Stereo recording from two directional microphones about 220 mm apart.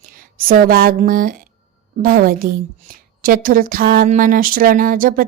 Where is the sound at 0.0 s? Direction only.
40° right (ahead or behind).